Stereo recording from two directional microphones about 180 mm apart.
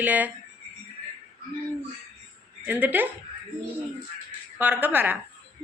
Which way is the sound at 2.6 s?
10° right (ahead or behind).